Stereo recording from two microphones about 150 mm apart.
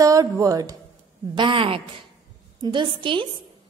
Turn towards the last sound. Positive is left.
turn(degrees=-35)  # may be behind; listen again after turning